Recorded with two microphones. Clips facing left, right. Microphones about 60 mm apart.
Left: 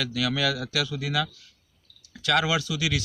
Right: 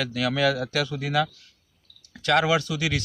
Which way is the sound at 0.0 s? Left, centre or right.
Right.